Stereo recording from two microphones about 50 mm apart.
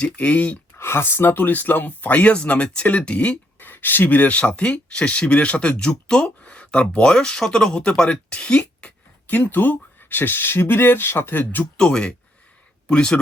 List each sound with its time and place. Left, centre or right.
0.0 s speech: left
0.8 s speech: left
3.6 s speech: left; by 8.9 s centre
9.2 s speech: left
11.8 s speech: centre